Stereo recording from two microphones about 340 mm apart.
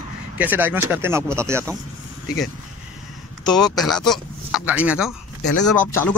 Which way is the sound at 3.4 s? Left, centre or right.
Centre.